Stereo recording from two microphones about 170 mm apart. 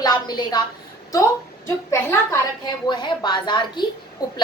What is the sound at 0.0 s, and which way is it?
A woman's voice, 25° left (ahead or behind).